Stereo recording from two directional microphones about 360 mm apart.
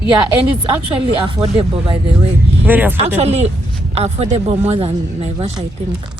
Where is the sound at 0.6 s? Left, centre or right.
Centre.